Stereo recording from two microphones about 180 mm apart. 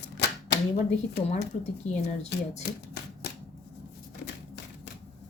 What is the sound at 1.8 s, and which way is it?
Speech, 40° left (ahead or behind).